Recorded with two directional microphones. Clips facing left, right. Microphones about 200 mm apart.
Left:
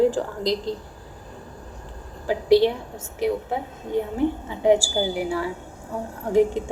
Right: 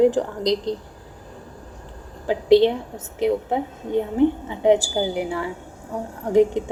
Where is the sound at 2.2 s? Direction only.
20° right (ahead or behind).